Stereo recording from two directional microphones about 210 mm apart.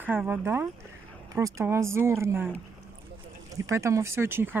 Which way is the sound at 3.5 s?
15° right (ahead or behind).